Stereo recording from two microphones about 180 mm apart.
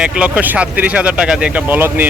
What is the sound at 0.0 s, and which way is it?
Speech, 5° right (ahead or behind).